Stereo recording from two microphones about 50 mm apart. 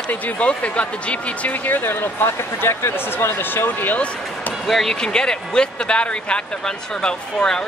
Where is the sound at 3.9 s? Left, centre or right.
Left.